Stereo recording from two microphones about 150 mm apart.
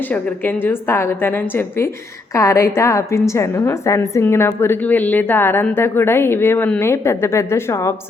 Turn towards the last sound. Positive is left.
turn(degrees=20)  # may be behind; listen again after turning